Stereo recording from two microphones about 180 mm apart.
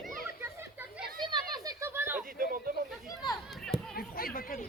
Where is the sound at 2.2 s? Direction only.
50° right (ahead or behind).